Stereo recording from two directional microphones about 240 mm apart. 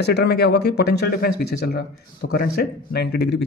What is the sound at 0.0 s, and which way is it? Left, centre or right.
Speech, left.